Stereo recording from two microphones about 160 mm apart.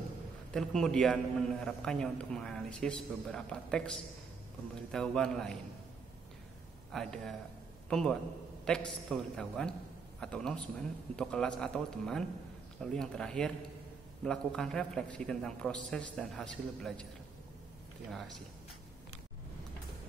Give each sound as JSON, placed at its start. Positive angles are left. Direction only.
{"t": 0.5, "sound": "a man's voice", "side_deg": 5}
{"t": 6.9, "sound": "a man's voice", "side_deg": 0}